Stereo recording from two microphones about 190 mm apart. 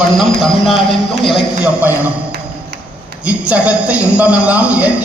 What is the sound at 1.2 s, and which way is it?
Speech, centre (ahead or behind).